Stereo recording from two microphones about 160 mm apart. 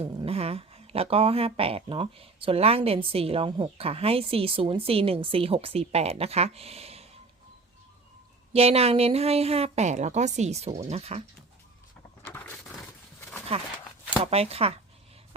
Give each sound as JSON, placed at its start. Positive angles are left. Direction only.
{"t": 0.0, "sound": "speech", "side_deg": -40}
{"t": 8.5, "sound": "speech", "side_deg": -40}
{"t": 12.2, "sound": "a sound", "side_deg": 15}
{"t": 14.3, "sound": "speech", "side_deg": -40}